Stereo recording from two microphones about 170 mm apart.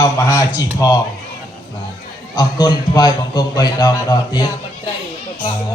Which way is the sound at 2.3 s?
25° left (ahead or behind).